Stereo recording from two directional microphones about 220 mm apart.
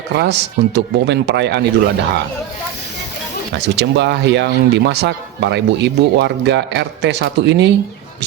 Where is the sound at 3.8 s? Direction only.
50° right (ahead or behind).